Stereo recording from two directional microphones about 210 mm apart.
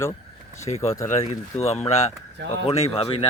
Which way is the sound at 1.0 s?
30° left (ahead or behind).